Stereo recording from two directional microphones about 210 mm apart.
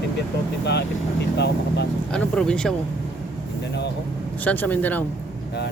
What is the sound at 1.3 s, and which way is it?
Speech, 55° left (ahead or behind).